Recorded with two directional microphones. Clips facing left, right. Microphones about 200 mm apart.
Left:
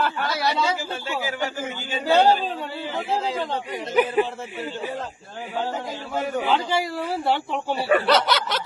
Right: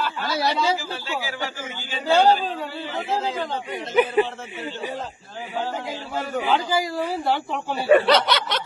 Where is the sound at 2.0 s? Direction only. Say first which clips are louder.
Even; centre (ahead or behind).